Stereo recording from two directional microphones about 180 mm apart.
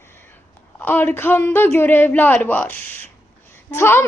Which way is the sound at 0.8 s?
10° left (ahead or behind).